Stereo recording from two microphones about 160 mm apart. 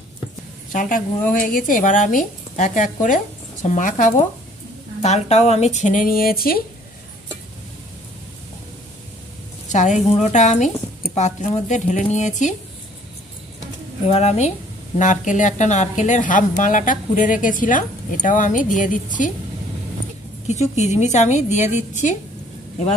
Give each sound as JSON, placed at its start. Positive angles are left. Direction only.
{"t": 0.7, "sound": "speech", "side_deg": 55}
{"t": 9.7, "sound": "speech", "side_deg": 50}
{"t": 14.0, "sound": "speech", "side_deg": 40}
{"t": 20.4, "sound": "speech", "side_deg": 45}